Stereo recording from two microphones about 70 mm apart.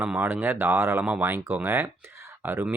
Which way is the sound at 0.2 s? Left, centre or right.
Right.